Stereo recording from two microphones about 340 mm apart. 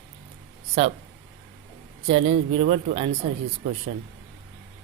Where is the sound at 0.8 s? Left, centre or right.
Centre.